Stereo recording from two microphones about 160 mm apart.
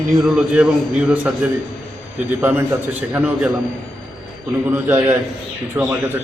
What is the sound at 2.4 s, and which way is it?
A man's voice, 10° right (ahead or behind).